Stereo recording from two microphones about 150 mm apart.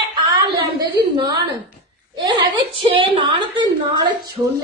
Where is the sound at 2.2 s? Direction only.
30° right (ahead or behind).